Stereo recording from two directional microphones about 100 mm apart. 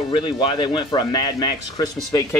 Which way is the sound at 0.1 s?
60° left (ahead or behind).